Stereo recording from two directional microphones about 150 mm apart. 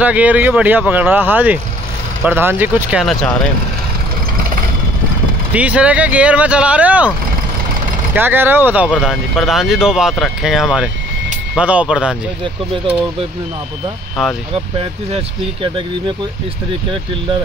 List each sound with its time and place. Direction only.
0.0 s speech: 10° right (ahead or behind)
3.0 s speech: centre (ahead or behind)
5.5 s speech: 10° right (ahead or behind)
8.1 s speech: 15° right (ahead or behind)
9.0 s speech: centre (ahead or behind)
14.5 s speech: 40° right (ahead or behind)